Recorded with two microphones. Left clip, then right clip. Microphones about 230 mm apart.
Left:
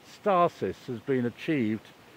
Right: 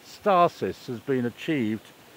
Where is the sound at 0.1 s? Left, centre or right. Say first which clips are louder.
Right 4 dB; centre.